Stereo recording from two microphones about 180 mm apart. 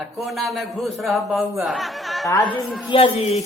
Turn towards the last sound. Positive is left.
turn(degrees=35)  # may be behind; listen again after turning